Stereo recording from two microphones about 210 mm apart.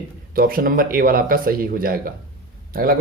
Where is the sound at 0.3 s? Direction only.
45° right (ahead or behind).